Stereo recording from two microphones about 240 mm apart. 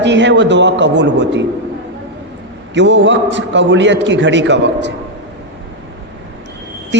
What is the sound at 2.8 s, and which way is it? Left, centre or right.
A man's voice, right.